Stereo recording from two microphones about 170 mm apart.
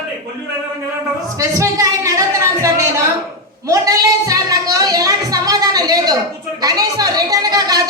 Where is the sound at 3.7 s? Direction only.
20° right (ahead or behind).